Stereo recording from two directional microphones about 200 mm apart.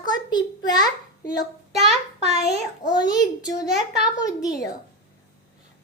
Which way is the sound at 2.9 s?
20° left (ahead or behind).